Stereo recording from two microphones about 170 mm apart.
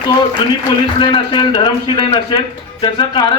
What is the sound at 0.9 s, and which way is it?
A man's voice, 30° left (ahead or behind).